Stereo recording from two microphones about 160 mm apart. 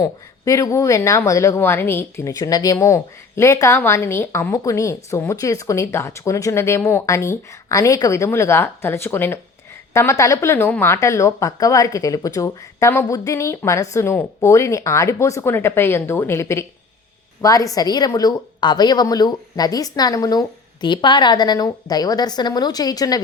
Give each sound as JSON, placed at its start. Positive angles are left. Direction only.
{"t": 0.0, "sound": "a woman's voice", "side_deg": 20}